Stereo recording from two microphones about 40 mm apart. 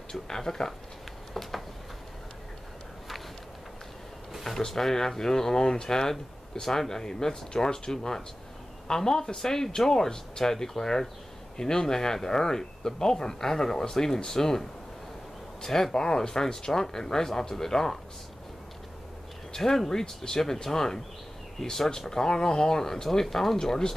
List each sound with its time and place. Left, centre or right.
0.1 s speech: centre
4.4 s speech: centre
19.5 s speech: centre
23.6 s speech: centre